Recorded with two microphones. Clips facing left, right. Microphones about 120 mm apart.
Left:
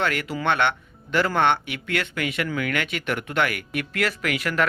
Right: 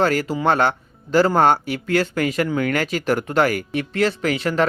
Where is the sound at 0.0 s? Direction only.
35° right (ahead or behind).